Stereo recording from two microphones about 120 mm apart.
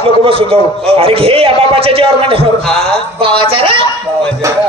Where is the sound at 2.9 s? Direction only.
50° right (ahead or behind).